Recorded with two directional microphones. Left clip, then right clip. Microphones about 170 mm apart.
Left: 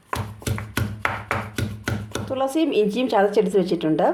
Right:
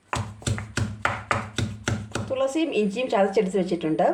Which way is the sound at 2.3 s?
25° left (ahead or behind).